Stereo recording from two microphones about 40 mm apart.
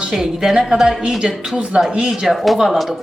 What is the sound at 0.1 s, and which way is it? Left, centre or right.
A woman's voice, centre.